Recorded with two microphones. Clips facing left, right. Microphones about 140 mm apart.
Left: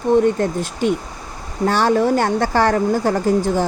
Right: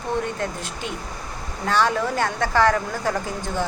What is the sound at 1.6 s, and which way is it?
A woman's voice, 35° left (ahead or behind).